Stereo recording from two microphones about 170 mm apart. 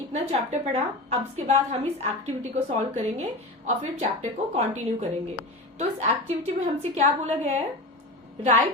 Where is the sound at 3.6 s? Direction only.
40° right (ahead or behind).